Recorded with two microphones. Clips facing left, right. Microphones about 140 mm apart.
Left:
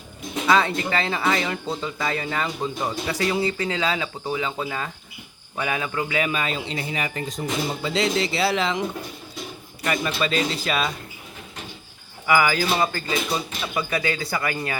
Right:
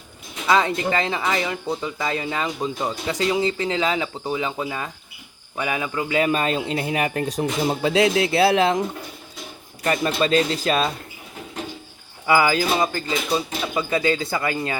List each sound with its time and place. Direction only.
0.4 s speech: 15° right (ahead or behind)
6.1 s speech: 40° right (ahead or behind)
9.8 s speech: 35° right (ahead or behind)
12.2 s speech: 25° right (ahead or behind)